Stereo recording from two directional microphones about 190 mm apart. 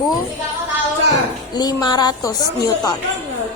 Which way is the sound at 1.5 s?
20° left (ahead or behind).